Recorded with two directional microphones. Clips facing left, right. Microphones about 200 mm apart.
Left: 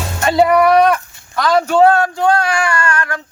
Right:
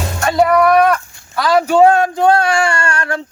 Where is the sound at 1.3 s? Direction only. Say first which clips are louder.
Right 1 dB; 10° right (ahead or behind); by 3.2 s 30° right (ahead or behind).